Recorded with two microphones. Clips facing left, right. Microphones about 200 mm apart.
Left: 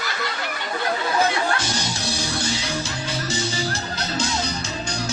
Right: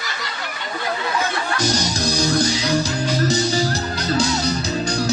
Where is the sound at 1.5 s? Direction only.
40° right (ahead or behind).